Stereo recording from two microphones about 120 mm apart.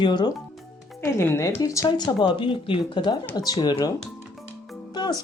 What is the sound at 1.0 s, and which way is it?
Speech, 25° left (ahead or behind).